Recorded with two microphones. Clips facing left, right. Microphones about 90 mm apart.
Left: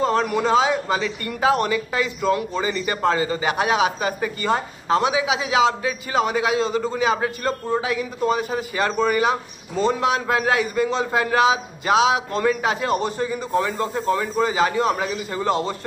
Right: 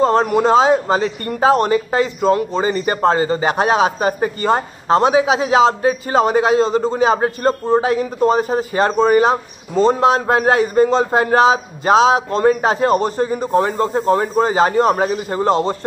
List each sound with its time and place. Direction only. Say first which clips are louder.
0.0 s speech: right 6 dB; 35° right (ahead or behind)